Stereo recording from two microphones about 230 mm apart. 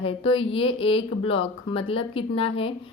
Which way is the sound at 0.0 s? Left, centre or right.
Left.